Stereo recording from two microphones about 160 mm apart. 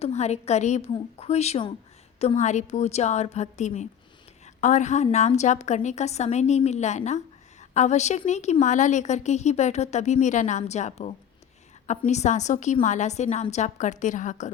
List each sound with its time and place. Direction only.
0.0 s a woman's voice: 45° left (ahead or behind)